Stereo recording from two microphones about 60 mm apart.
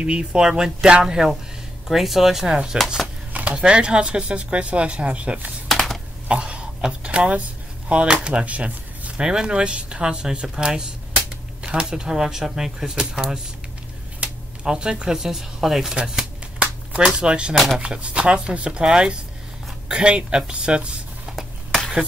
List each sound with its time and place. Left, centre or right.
0.0 s speech: centre
5.7 s computer keyboard: centre
6.2 s speech: centre
16.5 s a sound: centre
17.7 s speech: centre